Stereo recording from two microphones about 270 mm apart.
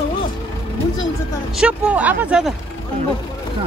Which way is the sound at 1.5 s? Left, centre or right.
Centre.